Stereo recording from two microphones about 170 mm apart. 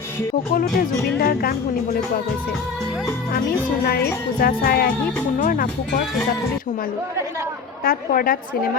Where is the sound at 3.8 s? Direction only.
65° left (ahead or behind).